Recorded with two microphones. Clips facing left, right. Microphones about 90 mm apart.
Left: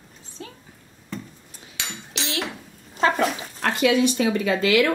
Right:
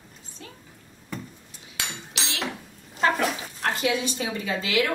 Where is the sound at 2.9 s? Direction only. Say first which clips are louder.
Left 2 dB; 35° left (ahead or behind).